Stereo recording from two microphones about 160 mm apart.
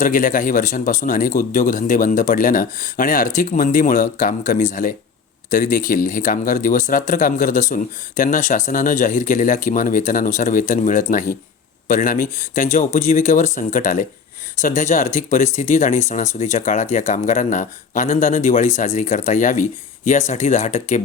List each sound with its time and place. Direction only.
0.0 s speech: 60° left (ahead or behind)